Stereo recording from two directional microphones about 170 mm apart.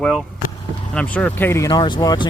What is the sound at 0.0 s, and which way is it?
Speech, 5° left (ahead or behind).